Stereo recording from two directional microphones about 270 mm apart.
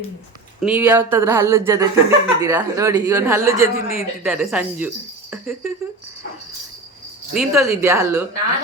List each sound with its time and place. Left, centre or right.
0.6 s speech: centre
7.3 s speech: centre